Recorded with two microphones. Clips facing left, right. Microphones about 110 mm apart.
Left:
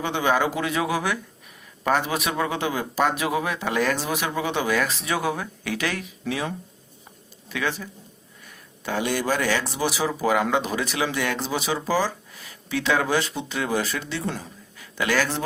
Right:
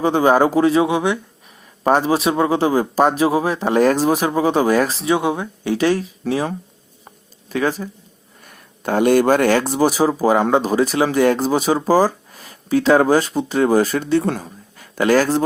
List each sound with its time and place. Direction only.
0.0 s speech: 35° right (ahead or behind)
8.4 s speech: 50° right (ahead or behind)